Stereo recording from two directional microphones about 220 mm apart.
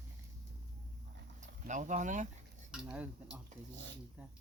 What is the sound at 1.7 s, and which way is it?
Speech, 35° right (ahead or behind).